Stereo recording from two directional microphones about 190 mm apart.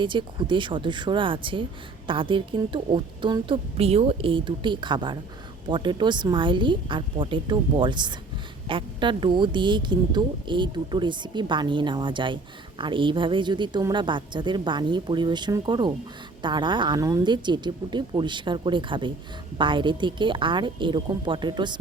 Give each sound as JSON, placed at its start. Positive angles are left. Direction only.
{"t": 0.0, "sound": "speech", "side_deg": -25}